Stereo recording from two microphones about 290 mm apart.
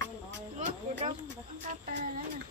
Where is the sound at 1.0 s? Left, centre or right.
Right.